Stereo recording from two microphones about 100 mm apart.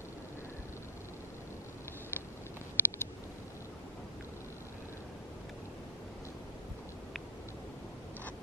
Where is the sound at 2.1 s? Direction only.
20° left (ahead or behind).